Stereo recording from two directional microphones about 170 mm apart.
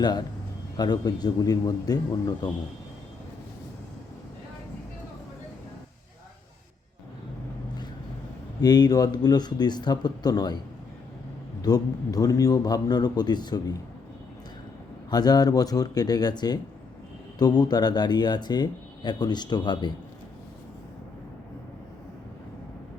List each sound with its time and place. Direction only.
0.0 s speech: 25° left (ahead or behind)
8.6 s speech: 25° left (ahead or behind)
11.6 s speech: 20° left (ahead or behind)
15.1 s speech: 25° left (ahead or behind)